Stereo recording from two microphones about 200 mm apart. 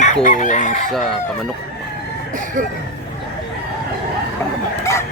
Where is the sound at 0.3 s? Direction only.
40° left (ahead or behind).